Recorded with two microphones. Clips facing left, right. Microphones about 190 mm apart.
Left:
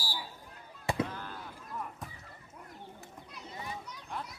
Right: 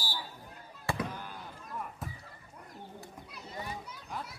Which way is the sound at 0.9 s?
20° left (ahead or behind).